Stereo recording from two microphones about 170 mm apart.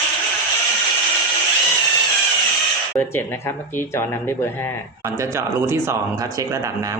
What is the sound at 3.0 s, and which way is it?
Speech, 15° left (ahead or behind).